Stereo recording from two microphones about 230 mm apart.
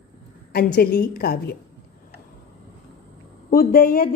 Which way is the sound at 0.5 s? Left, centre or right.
Left.